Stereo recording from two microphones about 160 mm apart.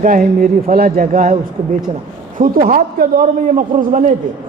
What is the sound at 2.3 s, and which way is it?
A man's voice, 55° right (ahead or behind).